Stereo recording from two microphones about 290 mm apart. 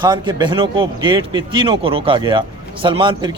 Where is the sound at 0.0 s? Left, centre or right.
Centre.